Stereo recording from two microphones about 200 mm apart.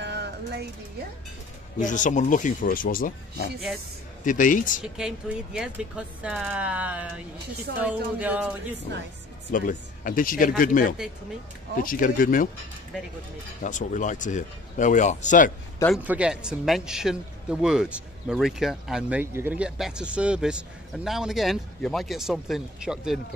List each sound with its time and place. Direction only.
0.0 s music: 55° right (ahead or behind)
1.8 s speech: 40° left (ahead or behind)
4.8 s a man's voice: 5° right (ahead or behind)
9.5 s speech: 40° left (ahead or behind)
13.6 s speech: 40° left (ahead or behind)
15.9 s a man's voice: 5° right (ahead or behind)